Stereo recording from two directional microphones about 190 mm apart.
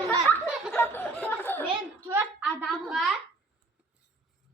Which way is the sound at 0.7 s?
10° left (ahead or behind).